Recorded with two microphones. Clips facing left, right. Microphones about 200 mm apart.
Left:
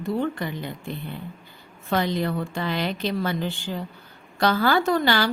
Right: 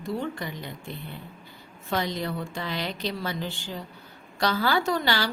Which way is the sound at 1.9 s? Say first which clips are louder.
Left 5 dB; 55° left (ahead or behind).